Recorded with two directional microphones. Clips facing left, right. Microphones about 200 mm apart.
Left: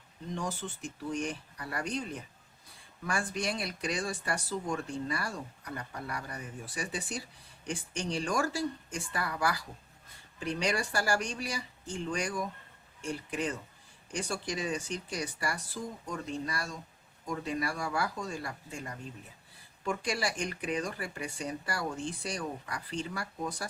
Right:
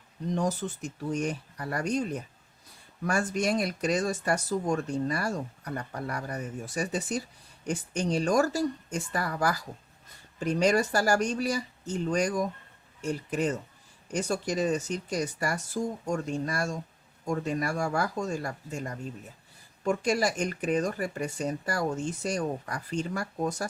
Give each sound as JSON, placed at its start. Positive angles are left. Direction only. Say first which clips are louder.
{"t": 0.3, "sound": "speech", "louder": "right 7 dB", "side_deg": -40}